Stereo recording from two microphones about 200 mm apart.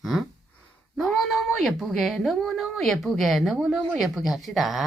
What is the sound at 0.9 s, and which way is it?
A woman's voice, centre (ahead or behind).